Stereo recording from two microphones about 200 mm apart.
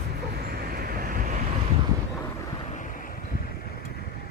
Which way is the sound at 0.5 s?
50° right (ahead or behind).